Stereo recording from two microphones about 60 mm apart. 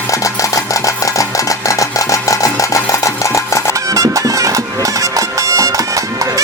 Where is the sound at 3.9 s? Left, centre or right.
Right.